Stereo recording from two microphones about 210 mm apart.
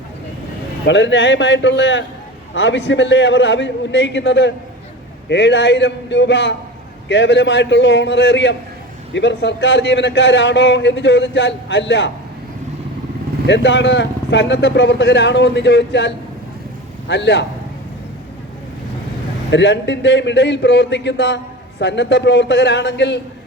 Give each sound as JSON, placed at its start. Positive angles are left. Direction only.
{"t": 0.9, "sound": "a man's voice", "side_deg": 60}
{"t": 13.5, "sound": "a man's voice", "side_deg": 55}
{"t": 19.5, "sound": "a man's voice", "side_deg": 60}